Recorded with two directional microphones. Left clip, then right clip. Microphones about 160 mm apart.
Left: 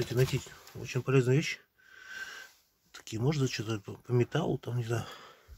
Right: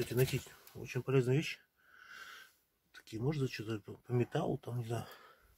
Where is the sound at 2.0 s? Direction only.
15° left (ahead or behind).